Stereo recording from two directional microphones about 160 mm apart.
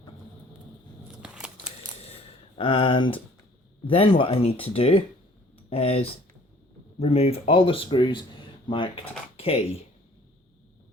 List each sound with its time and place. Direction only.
1.2 s scissors: 5° right (ahead or behind)
2.6 s speech: 30° left (ahead or behind)